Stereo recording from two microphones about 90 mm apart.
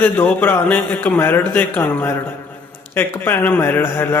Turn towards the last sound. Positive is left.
turn(degrees=25)  # may be behind; listen again after turning